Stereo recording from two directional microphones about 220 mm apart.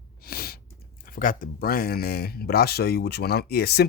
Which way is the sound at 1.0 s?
40° left (ahead or behind).